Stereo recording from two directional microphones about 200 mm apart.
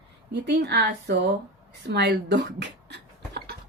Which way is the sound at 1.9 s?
55° right (ahead or behind).